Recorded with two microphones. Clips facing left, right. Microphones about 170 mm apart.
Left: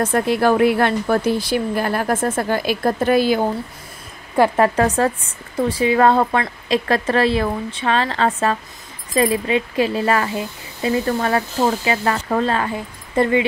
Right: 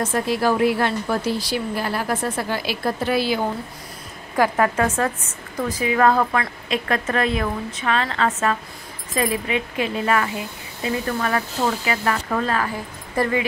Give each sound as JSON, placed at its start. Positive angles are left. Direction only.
{"t": 0.0, "sound": "a woman's voice", "side_deg": 55}
{"t": 4.4, "sound": "a woman's voice", "side_deg": 30}